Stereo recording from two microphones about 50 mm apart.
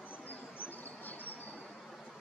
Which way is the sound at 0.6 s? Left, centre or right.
Left.